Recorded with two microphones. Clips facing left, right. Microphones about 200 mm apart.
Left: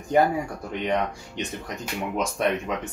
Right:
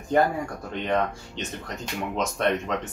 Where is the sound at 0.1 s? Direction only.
10° left (ahead or behind).